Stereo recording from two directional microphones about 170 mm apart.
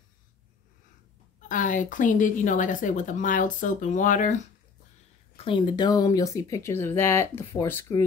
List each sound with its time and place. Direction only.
1.5 s speech: 50° left (ahead or behind)
5.4 s speech: 30° left (ahead or behind); by 8.0 s 15° left (ahead or behind)